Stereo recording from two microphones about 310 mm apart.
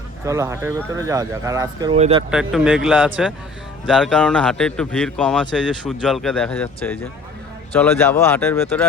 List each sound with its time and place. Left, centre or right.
0.3 s speech: centre
2.3 s speech: centre